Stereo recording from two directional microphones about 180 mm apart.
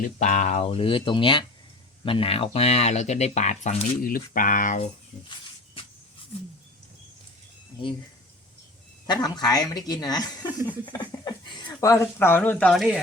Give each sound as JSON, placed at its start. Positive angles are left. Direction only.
{"t": 0.2, "sound": "speech", "side_deg": 40}
{"t": 9.0, "sound": "speech", "side_deg": 20}